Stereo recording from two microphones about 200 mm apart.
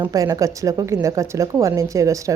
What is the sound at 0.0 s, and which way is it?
A woman's voice, 20° right (ahead or behind).